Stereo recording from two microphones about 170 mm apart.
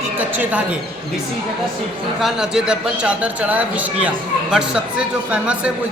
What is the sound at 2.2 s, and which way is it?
A man's voice, 5° right (ahead or behind).